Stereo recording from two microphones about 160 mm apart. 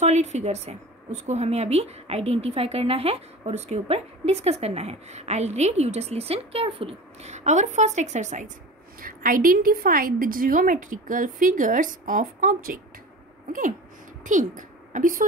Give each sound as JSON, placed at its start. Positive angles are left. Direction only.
{"t": 0.0, "sound": "a woman's voice", "side_deg": -45}
{"t": 9.0, "sound": "a woman's voice", "side_deg": -60}